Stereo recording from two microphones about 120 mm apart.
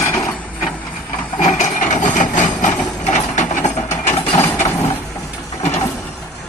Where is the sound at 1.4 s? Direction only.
90° left.